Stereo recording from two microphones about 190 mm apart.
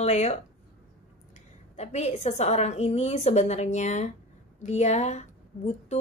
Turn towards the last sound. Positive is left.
turn(degrees=35)  # may be behind; listen again after turning